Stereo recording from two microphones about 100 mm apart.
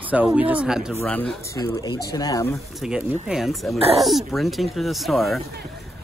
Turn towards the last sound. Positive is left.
turn(degrees=0)  # may be behind; listen again after turning